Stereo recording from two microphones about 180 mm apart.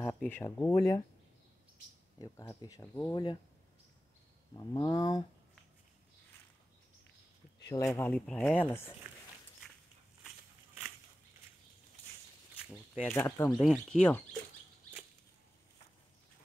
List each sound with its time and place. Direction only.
0.0 s speech: 10° left (ahead or behind)
2.1 s speech: 20° left (ahead or behind)
3.1 s speech: 25° left (ahead or behind)
4.7 s speech: 20° left (ahead or behind)
7.6 s speech: 20° left (ahead or behind)
12.6 s speech: centre (ahead or behind)
13.1 s speech: 10° left (ahead or behind)
13.5 s speech: centre (ahead or behind)